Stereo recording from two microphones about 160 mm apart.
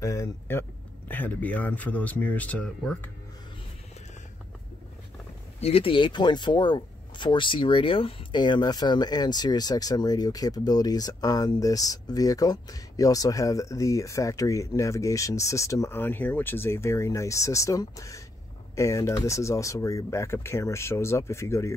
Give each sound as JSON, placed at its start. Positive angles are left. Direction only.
{"t": 0.0, "sound": "speech", "side_deg": 20}
{"t": 5.6, "sound": "speech", "side_deg": 35}